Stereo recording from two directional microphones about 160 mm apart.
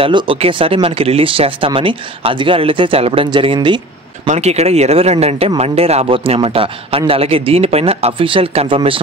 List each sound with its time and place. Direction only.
0.0 s speech: 35° right (ahead or behind)
4.3 s speech: 45° right (ahead or behind)